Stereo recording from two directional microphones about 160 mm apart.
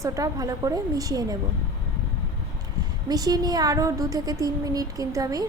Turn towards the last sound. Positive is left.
turn(degrees=-20)  # may be behind; listen again after turning